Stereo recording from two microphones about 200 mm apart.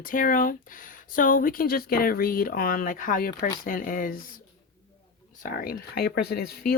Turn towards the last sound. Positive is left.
turn(degrees=50)  # may be behind; listen again after turning